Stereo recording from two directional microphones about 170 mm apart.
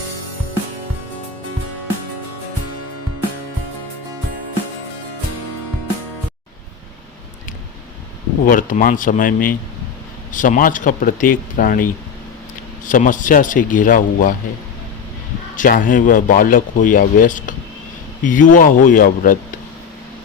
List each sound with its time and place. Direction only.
8.4 s speech: 55° left (ahead or behind)
15.5 s speech: 50° left (ahead or behind)